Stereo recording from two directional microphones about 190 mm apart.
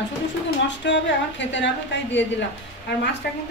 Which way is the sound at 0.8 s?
70° left (ahead or behind).